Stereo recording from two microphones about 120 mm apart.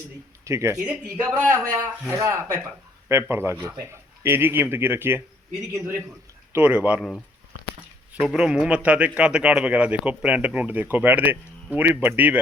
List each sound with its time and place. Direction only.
0.4 s a man's voice: 25° right (ahead or behind)
6.5 s a man's voice: 15° right (ahead or behind)
8.1 s a man's voice: 10° right (ahead or behind)